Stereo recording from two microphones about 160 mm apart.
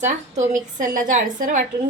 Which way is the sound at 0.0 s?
50° right (ahead or behind).